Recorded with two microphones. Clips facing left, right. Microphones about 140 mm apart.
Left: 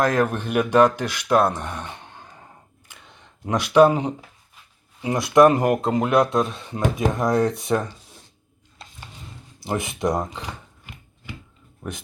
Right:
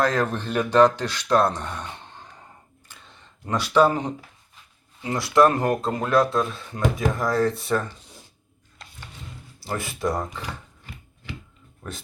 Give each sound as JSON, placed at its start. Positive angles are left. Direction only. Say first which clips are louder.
{"t": 0.0, "sound": "speech", "louder": "left 2 dB", "side_deg": 15}
{"t": 2.9, "sound": "a sound", "louder": "left 1 dB", "side_deg": 15}
{"t": 5.0, "sound": "speech", "louder": "left 3 dB", "side_deg": 20}
{"t": 9.6, "sound": "speech", "louder": "left 3 dB", "side_deg": 20}